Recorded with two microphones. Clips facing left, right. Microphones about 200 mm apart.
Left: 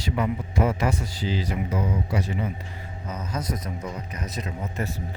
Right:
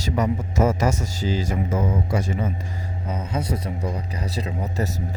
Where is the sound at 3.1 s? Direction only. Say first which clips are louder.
Right 4 dB; 30° right (ahead or behind).